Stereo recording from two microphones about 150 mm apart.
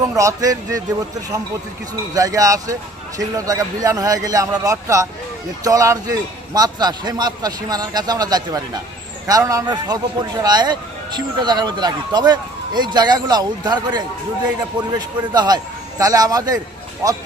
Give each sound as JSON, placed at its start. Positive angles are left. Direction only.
{"t": 0.0, "sound": "speech", "side_deg": -20}
{"t": 2.1, "sound": "speech", "side_deg": -25}